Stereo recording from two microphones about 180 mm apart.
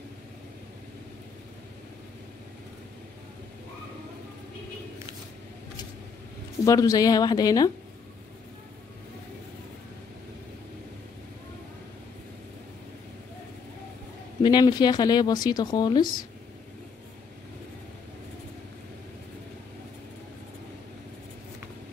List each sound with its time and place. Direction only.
6.6 s speech: 20° left (ahead or behind)
14.4 s speech: 25° left (ahead or behind)